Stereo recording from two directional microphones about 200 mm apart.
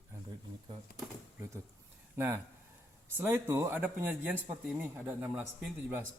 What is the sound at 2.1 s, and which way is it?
Speech, 10° right (ahead or behind).